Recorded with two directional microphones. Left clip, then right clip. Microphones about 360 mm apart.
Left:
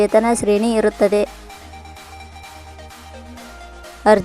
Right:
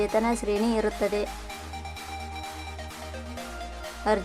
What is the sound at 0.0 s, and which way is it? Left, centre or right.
A woman's voice, centre.